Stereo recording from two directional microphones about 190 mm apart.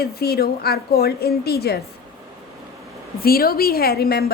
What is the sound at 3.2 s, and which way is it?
A woman's voice, 50° left (ahead or behind).